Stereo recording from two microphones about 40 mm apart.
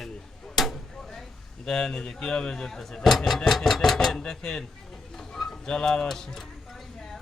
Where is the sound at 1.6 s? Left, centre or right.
Centre.